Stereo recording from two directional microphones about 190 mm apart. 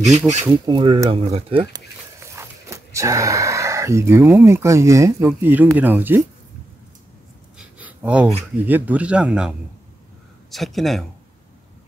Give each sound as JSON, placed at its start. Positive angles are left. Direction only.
{"t": 0.5, "sound": "speech", "side_deg": -25}
{"t": 2.1, "sound": "speech", "side_deg": -15}
{"t": 7.5, "sound": "a sound", "side_deg": -5}
{"t": 8.6, "sound": "speech", "side_deg": -10}